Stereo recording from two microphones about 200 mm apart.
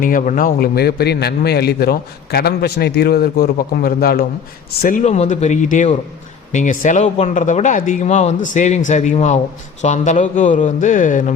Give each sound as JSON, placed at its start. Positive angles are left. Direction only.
{"t": 0.0, "sound": "a man's voice", "side_deg": 40}